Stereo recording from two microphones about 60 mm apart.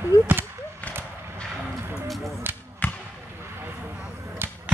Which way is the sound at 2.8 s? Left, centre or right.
Left.